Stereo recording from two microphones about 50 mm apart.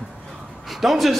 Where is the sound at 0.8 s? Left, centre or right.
Centre.